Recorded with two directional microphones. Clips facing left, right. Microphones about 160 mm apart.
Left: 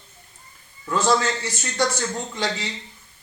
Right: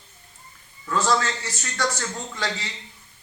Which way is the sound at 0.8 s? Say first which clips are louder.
Left 2 dB; 15° left (ahead or behind).